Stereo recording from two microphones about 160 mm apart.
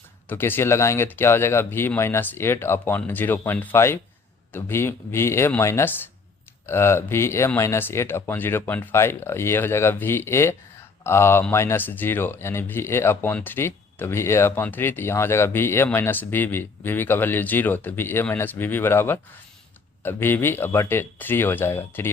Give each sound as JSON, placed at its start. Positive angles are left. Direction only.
{"t": 0.3, "sound": "speech", "side_deg": 15}